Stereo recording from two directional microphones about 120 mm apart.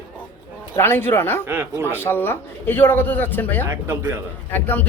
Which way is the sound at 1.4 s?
20° right (ahead or behind).